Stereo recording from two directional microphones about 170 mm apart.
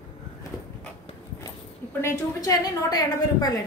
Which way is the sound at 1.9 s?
15° left (ahead or behind).